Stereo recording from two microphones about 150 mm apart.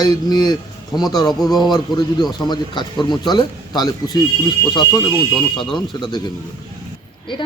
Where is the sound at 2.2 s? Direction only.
25° left (ahead or behind).